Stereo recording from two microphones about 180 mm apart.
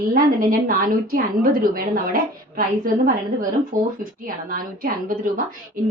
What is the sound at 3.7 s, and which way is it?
A woman's voice, 50° right (ahead or behind).